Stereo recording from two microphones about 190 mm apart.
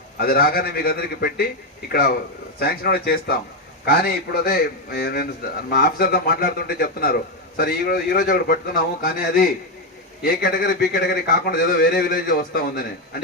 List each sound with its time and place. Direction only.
0.2 s a man's voice: 50° left (ahead or behind)